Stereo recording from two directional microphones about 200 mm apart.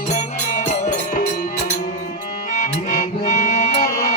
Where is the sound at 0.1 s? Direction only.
40° left (ahead or behind).